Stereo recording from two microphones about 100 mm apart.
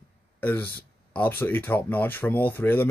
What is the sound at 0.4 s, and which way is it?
Speech, 15° left (ahead or behind).